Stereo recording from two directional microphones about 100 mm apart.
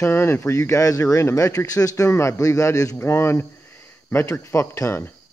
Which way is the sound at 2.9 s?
25° left (ahead or behind).